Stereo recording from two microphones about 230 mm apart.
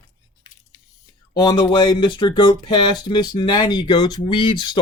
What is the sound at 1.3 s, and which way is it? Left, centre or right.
Speech, centre.